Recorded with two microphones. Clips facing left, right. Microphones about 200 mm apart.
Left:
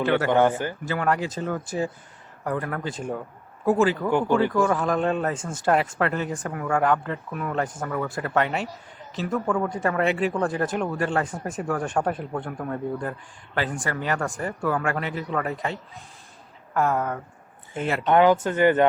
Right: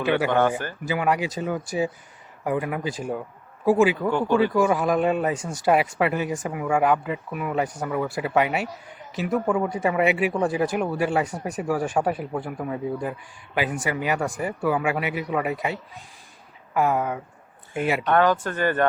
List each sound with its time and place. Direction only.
0.0 s speech: 10° right (ahead or behind)
0.3 s speech: 15° left (ahead or behind)
0.9 s speech: 5° right (ahead or behind)
18.0 s speech: 15° left (ahead or behind)